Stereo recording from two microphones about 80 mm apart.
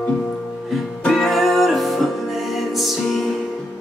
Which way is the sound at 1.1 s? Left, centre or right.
Centre.